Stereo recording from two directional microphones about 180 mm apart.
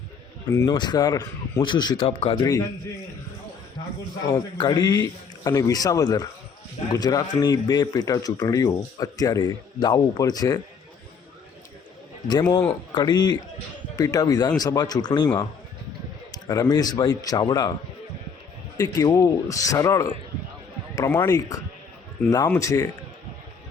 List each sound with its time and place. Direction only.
0.4 s speech: 15° left (ahead or behind)
4.3 s speech: 25° left (ahead or behind)
12.3 s speech: 20° left (ahead or behind)
18.8 s speech: 20° left (ahead or behind)